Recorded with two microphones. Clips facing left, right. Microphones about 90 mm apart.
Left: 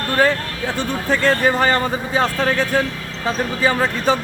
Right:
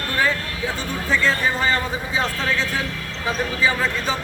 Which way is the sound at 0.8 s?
55° left (ahead or behind).